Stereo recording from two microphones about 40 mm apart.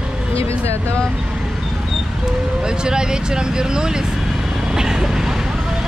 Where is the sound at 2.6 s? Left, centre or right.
Centre.